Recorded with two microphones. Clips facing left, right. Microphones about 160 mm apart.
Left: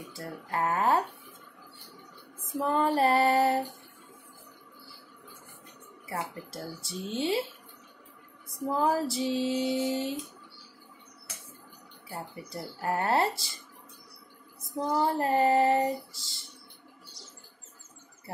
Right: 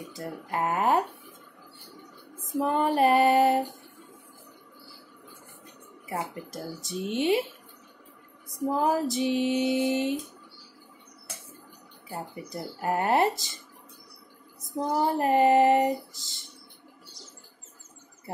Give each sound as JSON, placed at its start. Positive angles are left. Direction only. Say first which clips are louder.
{"t": 0.1, "sound": "female singing", "louder": "right 1 dB", "side_deg": -15}
{"t": 2.6, "sound": "female singing", "louder": "right 2 dB", "side_deg": -15}
{"t": 6.0, "sound": "female singing", "louder": "right 3 dB", "side_deg": -20}
{"t": 8.6, "sound": "female singing", "louder": "right 2 dB", "side_deg": -15}
{"t": 12.2, "sound": "female singing", "louder": "right 3 dB", "side_deg": -20}
{"t": 15.0, "sound": "female singing", "louder": "right 3 dB", "side_deg": -20}